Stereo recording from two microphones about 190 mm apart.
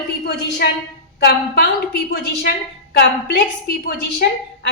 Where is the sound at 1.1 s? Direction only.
55° left (ahead or behind).